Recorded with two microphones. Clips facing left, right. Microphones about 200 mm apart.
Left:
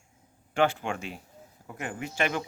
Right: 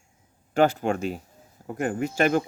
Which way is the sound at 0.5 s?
40° right (ahead or behind).